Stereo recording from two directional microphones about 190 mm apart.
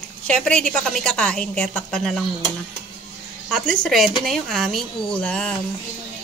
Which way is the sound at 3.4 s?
5° left (ahead or behind).